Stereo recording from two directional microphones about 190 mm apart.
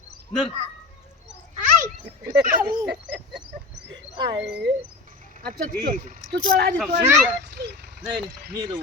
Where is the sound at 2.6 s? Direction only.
15° right (ahead or behind).